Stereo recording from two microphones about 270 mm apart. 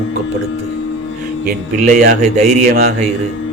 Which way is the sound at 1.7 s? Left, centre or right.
Right.